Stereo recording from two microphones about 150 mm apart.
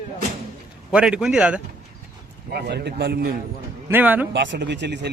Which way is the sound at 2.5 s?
90° right.